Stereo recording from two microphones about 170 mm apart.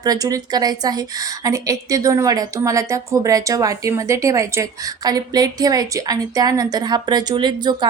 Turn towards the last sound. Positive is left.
turn(degrees=-25)  # may be behind; listen again after turning